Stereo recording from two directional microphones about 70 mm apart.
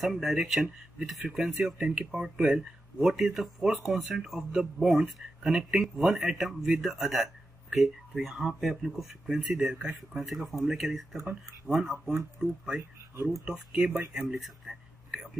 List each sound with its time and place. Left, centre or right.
0.0 s speech: centre
13.1 s speech: right
13.5 s speech: centre
14.4 s a sound: centre